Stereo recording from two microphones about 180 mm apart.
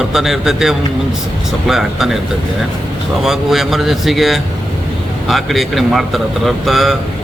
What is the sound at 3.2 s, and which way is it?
Speech, centre (ahead or behind).